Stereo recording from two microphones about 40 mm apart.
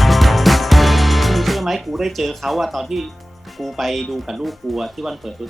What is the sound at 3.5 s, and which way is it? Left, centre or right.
Speech, centre.